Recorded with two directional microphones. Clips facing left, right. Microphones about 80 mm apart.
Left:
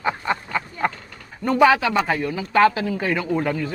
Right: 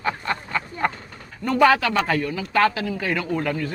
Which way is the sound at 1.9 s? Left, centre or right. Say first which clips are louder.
Left 1 dB; centre.